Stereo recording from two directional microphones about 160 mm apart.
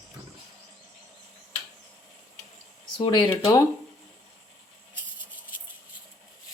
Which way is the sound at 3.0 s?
30° left (ahead or behind).